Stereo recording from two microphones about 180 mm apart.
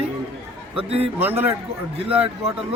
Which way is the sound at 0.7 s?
35° right (ahead or behind).